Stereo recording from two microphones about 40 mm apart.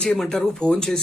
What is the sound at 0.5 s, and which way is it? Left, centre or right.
Speech, left.